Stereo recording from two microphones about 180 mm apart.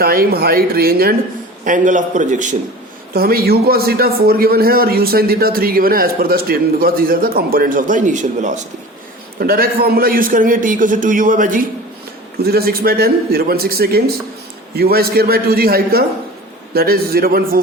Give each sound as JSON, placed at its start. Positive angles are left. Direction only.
{"t": 0.0, "sound": "a man's voice", "side_deg": -55}
{"t": 1.6, "sound": "a man's voice", "side_deg": -45}
{"t": 3.2, "sound": "a man's voice", "side_deg": -60}
{"t": 9.4, "sound": "a man's voice", "side_deg": -55}
{"t": 12.4, "sound": "a man's voice", "side_deg": -60}